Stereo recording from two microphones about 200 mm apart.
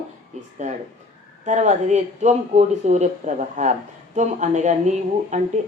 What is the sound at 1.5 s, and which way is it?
Speech, 35° right (ahead or behind).